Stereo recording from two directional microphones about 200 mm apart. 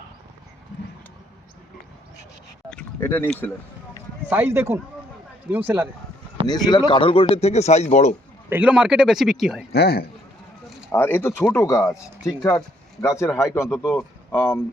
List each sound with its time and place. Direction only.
2.6 s a sound: 10° left (ahead or behind)
4.3 s speech: 10° right (ahead or behind)
6.5 s speech: 20° left (ahead or behind)
8.4 s speech: 10° right (ahead or behind)
9.7 s a man's voice: 50° left (ahead or behind)
10.9 s speech: 10° left (ahead or behind)